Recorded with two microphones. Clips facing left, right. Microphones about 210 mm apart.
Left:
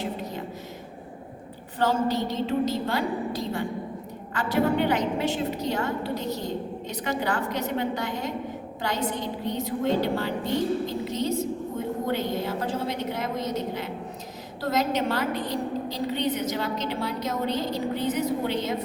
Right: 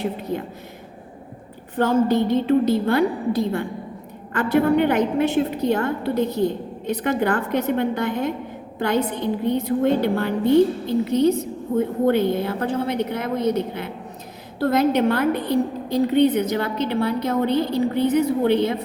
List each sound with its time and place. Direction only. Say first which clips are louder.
1.7 s a woman's voice: right 6 dB; 55° right (ahead or behind)